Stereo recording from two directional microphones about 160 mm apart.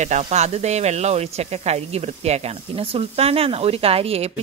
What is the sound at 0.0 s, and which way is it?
Speech, 45° right (ahead or behind).